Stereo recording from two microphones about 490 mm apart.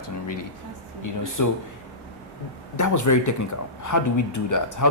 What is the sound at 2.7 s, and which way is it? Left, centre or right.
Speech, left.